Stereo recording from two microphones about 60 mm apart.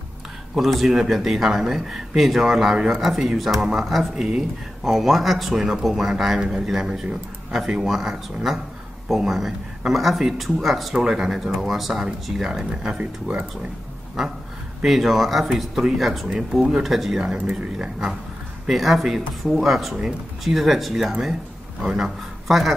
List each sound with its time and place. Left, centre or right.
0.6 s speech: centre; by 13.7 s right
14.2 s speech: centre
17.6 s speech: centre
18.7 s speech: centre